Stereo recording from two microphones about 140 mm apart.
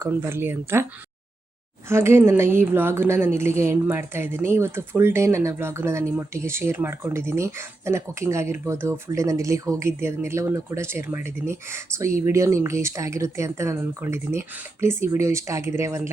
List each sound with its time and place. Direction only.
0.0 s speech: 15° right (ahead or behind)
1.9 s a woman's voice: 20° right (ahead or behind)